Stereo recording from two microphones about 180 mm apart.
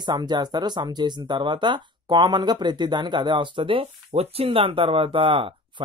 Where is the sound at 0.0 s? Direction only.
25° right (ahead or behind).